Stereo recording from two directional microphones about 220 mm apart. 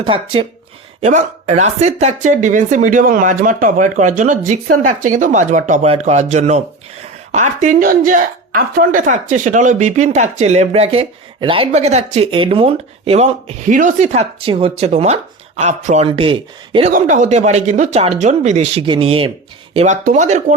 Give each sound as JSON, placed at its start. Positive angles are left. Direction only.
{"t": 0.0, "sound": "speech", "side_deg": -25}
{"t": 16.9, "sound": "speech", "side_deg": -35}